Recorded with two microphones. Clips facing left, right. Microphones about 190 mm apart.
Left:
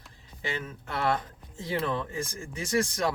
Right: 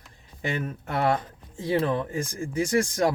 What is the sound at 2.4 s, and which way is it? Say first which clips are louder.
Speech: right 5 dB; 20° right (ahead or behind).